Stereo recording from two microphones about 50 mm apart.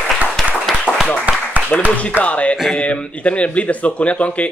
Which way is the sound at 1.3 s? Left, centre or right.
Right.